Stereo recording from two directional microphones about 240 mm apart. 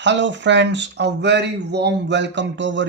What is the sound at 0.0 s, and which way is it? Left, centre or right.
Speech, right.